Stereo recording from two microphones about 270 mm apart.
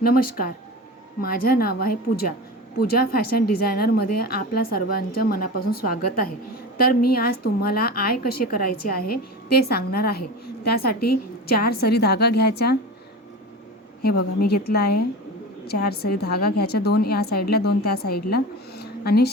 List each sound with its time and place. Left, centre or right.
0.0 s a woman's voice: left
11.0 s a woman's voice: left
11.5 s a woman's voice: left
14.3 s a woman's voice: left